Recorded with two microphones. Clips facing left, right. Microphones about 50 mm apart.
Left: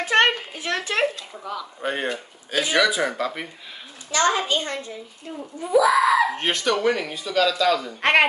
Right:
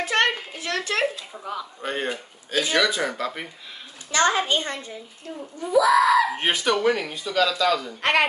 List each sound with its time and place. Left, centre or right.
0.0 s a sound: left
1.3 s speech: centre
1.8 s speech: centre
4.1 s a child's voice: right
5.4 s speech: centre
6.3 s speech: centre
8.0 s speech: left